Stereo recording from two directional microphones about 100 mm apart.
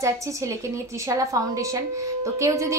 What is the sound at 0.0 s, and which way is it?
A woman's voice, 30° right (ahead or behind).